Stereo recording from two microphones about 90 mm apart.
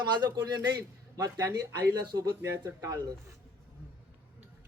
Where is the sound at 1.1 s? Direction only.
40° right (ahead or behind).